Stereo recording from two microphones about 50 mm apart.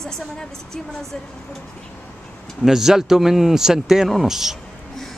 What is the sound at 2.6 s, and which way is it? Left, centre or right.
Speech, centre.